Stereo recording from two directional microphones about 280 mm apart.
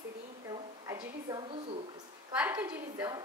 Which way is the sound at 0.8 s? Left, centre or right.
Centre.